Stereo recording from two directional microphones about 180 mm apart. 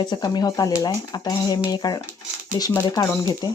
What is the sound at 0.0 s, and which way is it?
Speech, 25° left (ahead or behind).